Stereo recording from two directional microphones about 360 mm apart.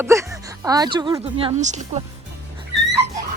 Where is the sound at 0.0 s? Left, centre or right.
Centre.